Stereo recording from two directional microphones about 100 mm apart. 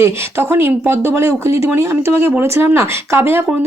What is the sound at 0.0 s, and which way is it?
Speech, 25° right (ahead or behind).